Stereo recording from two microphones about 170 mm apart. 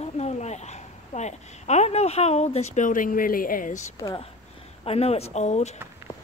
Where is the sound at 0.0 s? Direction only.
40° left (ahead or behind).